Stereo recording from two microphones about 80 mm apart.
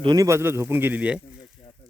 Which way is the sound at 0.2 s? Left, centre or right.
Right.